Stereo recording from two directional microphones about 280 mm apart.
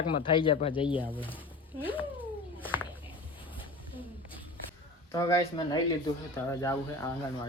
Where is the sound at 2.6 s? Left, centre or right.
Centre.